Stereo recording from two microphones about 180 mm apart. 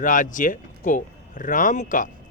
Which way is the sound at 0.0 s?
45° left (ahead or behind).